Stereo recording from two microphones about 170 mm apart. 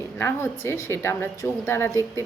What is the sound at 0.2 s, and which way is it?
A woman's voice, 15° left (ahead or behind).